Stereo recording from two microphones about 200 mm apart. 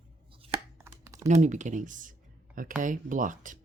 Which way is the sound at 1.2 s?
35° right (ahead or behind).